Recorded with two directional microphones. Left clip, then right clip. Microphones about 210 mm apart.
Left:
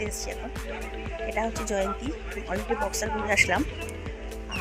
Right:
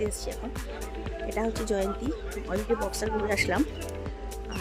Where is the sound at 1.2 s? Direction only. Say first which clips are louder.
Even; centre (ahead or behind).